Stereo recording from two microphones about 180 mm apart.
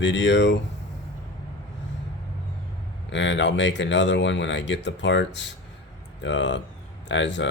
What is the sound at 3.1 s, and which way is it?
Speech, 90° left.